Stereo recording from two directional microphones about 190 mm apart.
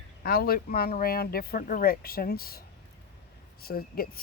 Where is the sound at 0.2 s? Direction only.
50° left (ahead or behind).